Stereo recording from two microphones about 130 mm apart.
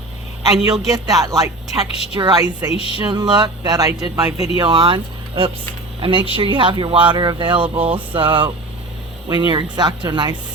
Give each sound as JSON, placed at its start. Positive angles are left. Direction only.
{"t": 0.9, "sound": "speech", "side_deg": -30}
{"t": 2.7, "sound": "music", "side_deg": 45}
{"t": 3.1, "sound": "speech", "side_deg": -35}
{"t": 4.5, "sound": "speech", "side_deg": -35}